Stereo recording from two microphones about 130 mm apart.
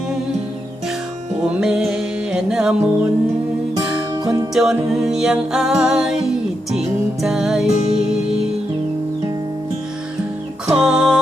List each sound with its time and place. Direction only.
1.5 s music: 5° right (ahead or behind)
4.1 s music: 25° right (ahead or behind)
4.5 s music: 5° right (ahead or behind)
10.8 s music: 5° right (ahead or behind)